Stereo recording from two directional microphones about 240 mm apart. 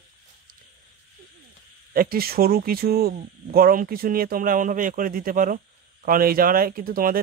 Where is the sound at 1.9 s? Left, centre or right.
Right.